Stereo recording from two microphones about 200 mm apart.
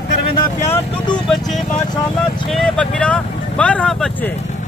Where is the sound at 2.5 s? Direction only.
5° left (ahead or behind).